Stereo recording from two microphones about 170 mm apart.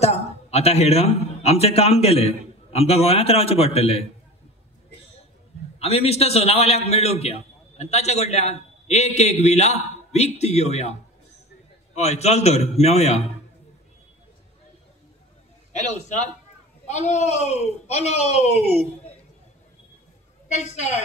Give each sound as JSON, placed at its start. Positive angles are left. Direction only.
{"t": 0.0, "sound": "a man's voice", "side_deg": 40}
{"t": 5.8, "sound": "a man's voice", "side_deg": 35}
{"t": 16.8, "sound": "a man's voice", "side_deg": 45}
{"t": 20.4, "sound": "a woman's voice", "side_deg": 40}